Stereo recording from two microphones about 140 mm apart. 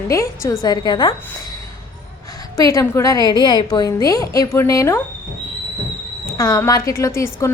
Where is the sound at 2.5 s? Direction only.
25° left (ahead or behind).